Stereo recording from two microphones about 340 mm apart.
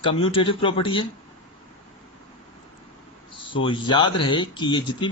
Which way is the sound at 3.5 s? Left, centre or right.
Centre.